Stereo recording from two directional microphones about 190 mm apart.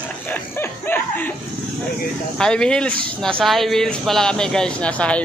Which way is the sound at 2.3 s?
5° left (ahead or behind).